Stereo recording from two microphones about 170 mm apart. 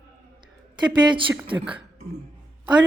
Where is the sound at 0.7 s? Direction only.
25° right (ahead or behind).